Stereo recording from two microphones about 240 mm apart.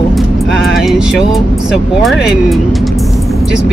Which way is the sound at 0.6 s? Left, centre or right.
Left.